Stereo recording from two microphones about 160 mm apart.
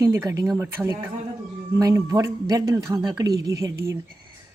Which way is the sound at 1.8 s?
20° right (ahead or behind).